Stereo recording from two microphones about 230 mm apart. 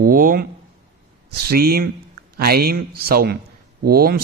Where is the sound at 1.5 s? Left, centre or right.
Right.